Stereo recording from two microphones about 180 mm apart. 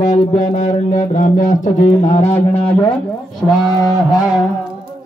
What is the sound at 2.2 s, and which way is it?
Speech, 35° left (ahead or behind).